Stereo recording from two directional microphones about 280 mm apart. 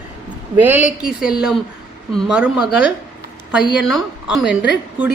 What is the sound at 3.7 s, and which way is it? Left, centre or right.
Speech, centre.